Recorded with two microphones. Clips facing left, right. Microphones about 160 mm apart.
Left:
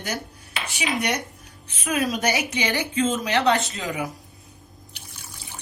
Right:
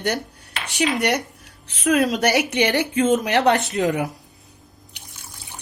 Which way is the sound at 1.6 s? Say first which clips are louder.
Right 6 dB; 70° right (ahead or behind).